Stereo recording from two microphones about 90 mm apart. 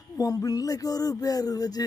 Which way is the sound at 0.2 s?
40° left (ahead or behind).